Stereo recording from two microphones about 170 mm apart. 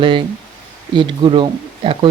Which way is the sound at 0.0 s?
30° right (ahead or behind).